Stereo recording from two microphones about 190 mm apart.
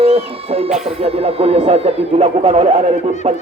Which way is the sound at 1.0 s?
30° right (ahead or behind).